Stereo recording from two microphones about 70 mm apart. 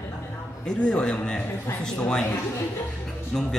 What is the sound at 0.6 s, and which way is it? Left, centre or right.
A man's voice, centre.